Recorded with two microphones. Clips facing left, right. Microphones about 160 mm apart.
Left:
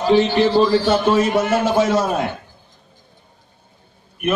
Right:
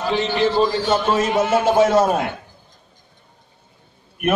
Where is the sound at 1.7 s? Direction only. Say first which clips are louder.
Right 2 dB; 50° right (ahead or behind).